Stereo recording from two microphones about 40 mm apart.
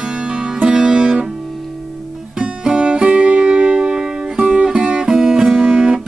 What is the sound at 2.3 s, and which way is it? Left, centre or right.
Music, right.